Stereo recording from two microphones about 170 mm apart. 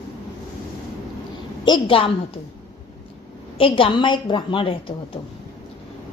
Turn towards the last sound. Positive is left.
turn(degrees=30)  # may be behind; listen again after turning